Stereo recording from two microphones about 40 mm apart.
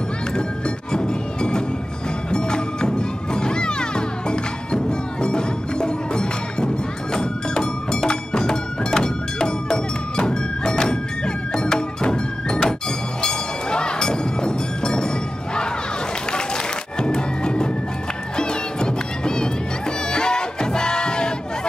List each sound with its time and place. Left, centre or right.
0.9 s music: left
13.2 s a sound: centre
16.3 s music: left